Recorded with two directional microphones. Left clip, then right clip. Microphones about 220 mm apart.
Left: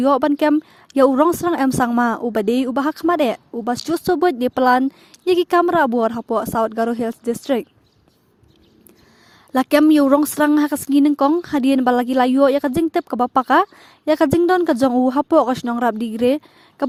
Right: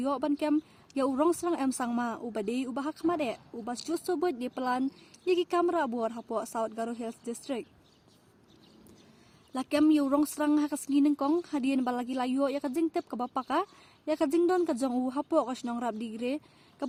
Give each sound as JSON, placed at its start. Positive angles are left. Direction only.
{"t": 0.0, "sound": "speech", "side_deg": 40}
{"t": 9.5, "sound": "speech", "side_deg": 40}